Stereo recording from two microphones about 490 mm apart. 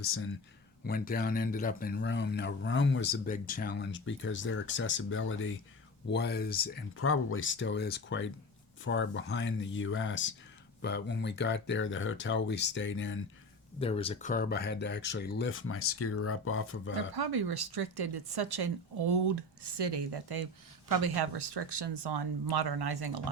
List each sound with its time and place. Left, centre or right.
0.0 s a man's voice: left
13.7 s a man's voice: centre
16.9 s speech: right